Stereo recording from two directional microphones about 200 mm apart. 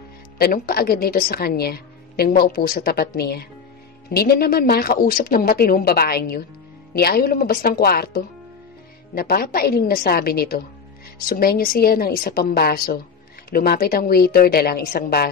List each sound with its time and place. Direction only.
0.4 s a woman's voice: 50° left (ahead or behind)